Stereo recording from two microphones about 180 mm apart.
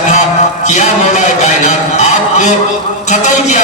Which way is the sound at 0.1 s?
40° left (ahead or behind).